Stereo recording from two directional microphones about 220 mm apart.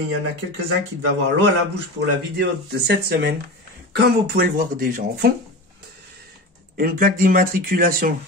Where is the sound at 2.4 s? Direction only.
45° right (ahead or behind).